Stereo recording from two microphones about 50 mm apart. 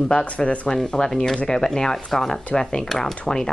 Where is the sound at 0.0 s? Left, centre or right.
Centre.